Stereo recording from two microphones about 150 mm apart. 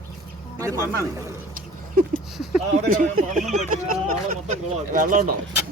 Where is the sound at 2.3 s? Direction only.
Centre (ahead or behind).